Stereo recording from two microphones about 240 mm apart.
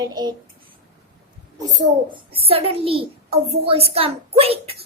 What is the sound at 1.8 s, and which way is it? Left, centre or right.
A child's voice, right.